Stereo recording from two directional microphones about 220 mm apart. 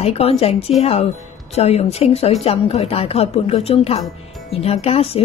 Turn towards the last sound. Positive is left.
turn(degrees=25)  # may be behind; listen again after turning